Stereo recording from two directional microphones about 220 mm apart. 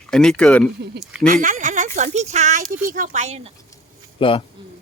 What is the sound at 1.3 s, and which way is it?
Speech, 35° right (ahead or behind).